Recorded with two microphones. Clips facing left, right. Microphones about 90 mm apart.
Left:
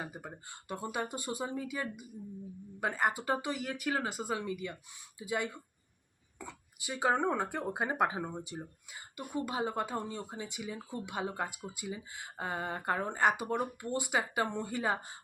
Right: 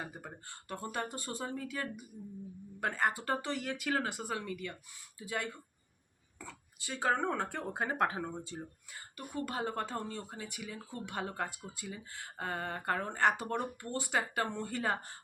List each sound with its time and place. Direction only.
0.0 s speech: 10° left (ahead or behind)